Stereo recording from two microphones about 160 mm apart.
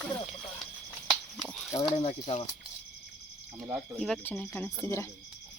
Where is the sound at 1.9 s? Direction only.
40° left (ahead or behind).